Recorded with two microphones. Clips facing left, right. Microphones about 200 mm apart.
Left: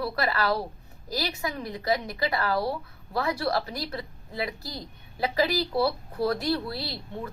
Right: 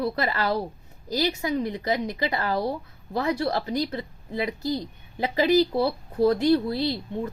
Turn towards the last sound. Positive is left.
turn(degrees=-20)  # may be behind; listen again after turning